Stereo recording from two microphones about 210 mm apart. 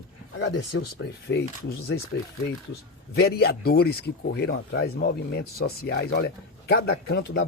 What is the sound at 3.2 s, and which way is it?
Speech, 50° left (ahead or behind).